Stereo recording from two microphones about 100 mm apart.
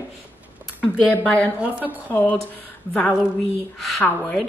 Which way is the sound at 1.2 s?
15° left (ahead or behind).